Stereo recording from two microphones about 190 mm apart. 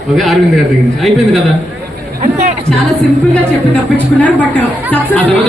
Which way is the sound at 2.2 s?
40° right (ahead or behind).